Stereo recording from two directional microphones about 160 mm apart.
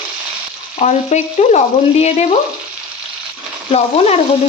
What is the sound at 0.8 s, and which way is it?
Frying, 45° left (ahead or behind).